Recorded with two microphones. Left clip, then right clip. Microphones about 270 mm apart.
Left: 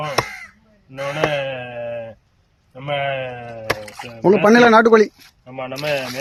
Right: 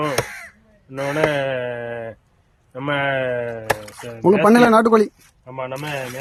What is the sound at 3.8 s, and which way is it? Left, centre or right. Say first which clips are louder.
Speech: left 3 dB; centre.